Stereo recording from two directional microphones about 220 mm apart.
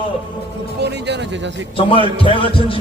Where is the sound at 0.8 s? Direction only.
50° right (ahead or behind).